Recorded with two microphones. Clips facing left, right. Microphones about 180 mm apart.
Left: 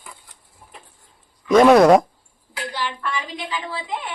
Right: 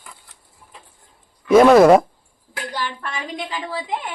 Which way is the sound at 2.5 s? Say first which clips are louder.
Even; 50° right (ahead or behind).